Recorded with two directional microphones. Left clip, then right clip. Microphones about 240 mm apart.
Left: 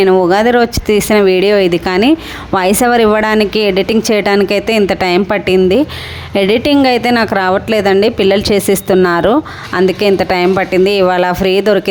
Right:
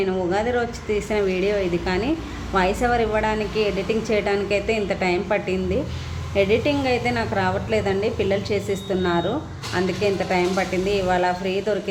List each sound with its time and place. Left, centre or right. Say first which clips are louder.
0.0 s speech: left 13 dB; left